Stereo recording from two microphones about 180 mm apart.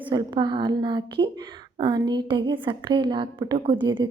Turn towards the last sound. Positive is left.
turn(degrees=-25)  # may be behind; listen again after turning